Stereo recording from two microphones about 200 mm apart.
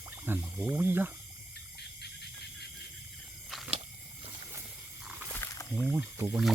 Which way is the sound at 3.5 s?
Centre (ahead or behind).